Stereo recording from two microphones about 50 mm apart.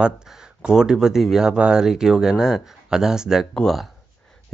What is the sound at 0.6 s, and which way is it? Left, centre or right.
Speech, centre.